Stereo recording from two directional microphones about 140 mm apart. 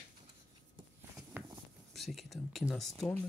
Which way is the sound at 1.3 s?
15° right (ahead or behind).